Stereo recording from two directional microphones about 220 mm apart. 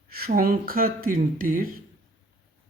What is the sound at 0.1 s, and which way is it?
A man's voice, 45° right (ahead or behind).